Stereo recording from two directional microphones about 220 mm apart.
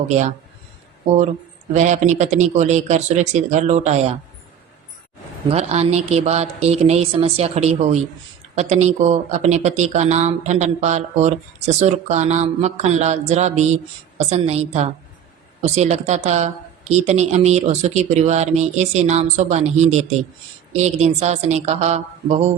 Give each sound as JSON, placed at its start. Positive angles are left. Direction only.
{"t": 1.7, "sound": "speech", "side_deg": -30}
{"t": 5.5, "sound": "speech", "side_deg": -30}